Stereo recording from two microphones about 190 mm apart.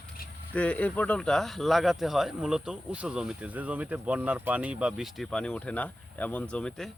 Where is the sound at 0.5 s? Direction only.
5° left (ahead or behind).